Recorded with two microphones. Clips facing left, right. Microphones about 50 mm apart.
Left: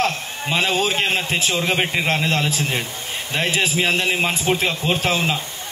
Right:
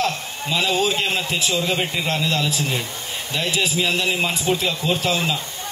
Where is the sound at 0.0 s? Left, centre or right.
Left.